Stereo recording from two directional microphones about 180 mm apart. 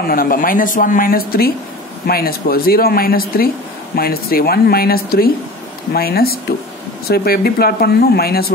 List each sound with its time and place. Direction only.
0.1 s speech: 55° left (ahead or behind)